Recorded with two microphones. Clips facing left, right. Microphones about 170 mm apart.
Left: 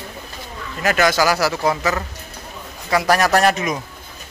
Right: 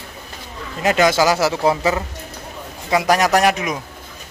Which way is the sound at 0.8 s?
20° right (ahead or behind).